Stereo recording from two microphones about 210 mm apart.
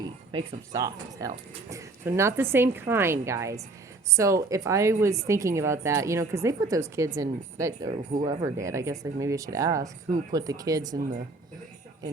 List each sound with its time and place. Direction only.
0.0 s speech: 20° right (ahead or behind)